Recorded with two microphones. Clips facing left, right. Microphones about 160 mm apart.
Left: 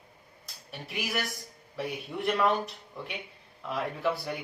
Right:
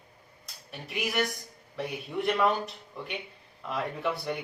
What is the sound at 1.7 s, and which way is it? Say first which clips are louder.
Speech: right 2 dB; centre (ahead or behind).